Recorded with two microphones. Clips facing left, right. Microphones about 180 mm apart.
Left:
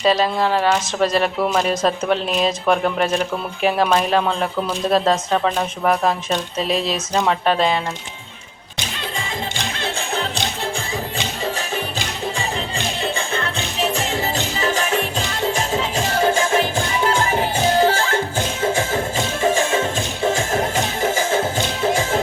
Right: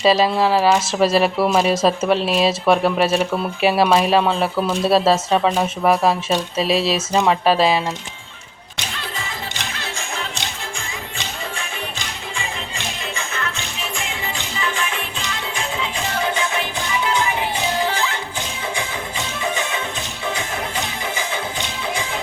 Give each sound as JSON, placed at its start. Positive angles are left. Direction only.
{"t": 0.0, "sound": "speech", "side_deg": -10}
{"t": 13.1, "sound": "music", "side_deg": 30}